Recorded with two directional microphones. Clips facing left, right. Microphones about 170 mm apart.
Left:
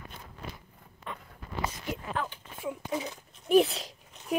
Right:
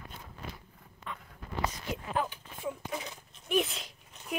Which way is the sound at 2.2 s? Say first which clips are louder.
Right 5 dB; 10° right (ahead or behind).